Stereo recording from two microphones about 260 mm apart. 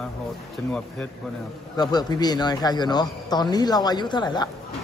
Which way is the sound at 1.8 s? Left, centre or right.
Centre.